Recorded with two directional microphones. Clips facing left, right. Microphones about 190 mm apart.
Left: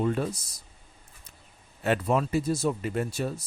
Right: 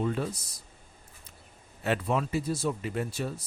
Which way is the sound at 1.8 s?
50° left (ahead or behind).